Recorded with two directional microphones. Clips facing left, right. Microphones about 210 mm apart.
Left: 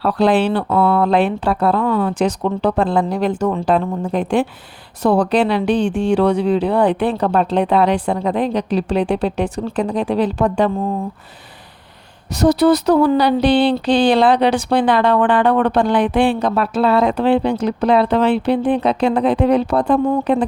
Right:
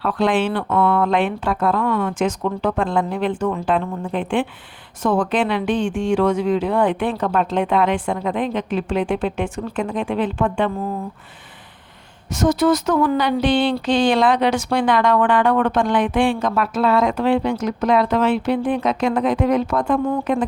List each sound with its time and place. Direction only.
0.0 s speech: 35° left (ahead or behind)
12.3 s speech: 35° left (ahead or behind)